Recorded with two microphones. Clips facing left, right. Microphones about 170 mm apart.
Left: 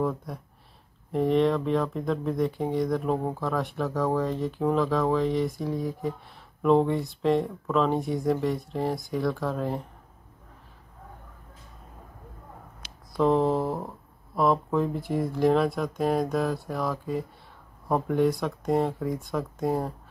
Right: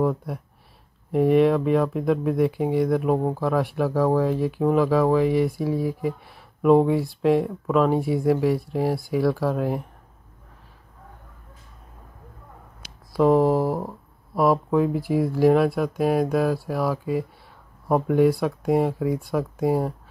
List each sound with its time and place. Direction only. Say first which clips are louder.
1.1 s speech: right 5 dB; 10° right (ahead or behind)
13.1 s speech: right 5 dB; 10° right (ahead or behind)